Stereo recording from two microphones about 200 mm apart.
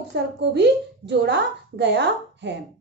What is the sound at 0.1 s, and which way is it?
A woman's voice, 60° right (ahead or behind).